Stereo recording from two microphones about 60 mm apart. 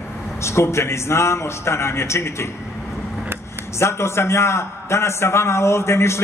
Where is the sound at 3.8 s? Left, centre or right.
Left.